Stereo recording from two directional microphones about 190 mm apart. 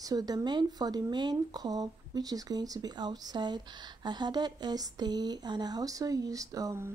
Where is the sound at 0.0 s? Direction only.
20° right (ahead or behind).